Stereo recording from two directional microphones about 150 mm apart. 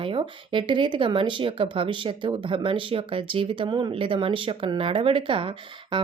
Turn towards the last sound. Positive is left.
turn(degrees=-35)  # may be behind; listen again after turning